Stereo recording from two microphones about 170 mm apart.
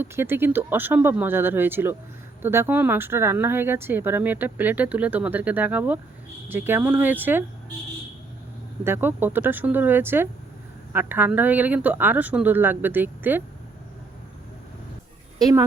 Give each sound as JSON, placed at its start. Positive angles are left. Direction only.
{"t": 0.0, "sound": "speech", "side_deg": -15}
{"t": 8.8, "sound": "speech", "side_deg": -15}
{"t": 15.4, "sound": "speech", "side_deg": -20}